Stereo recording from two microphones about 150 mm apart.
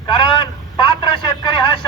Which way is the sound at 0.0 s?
30° left (ahead or behind).